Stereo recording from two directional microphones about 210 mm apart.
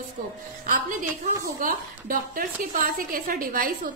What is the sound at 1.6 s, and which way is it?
A woman's voice, 40° right (ahead or behind).